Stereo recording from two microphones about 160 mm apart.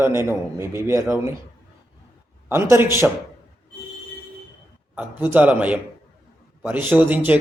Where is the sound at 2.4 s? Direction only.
15° right (ahead or behind).